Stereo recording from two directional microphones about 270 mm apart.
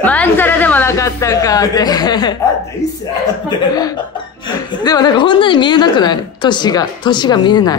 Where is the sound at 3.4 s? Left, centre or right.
Centre.